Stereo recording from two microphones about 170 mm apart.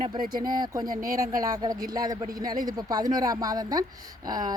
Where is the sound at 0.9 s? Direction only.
55° right (ahead or behind).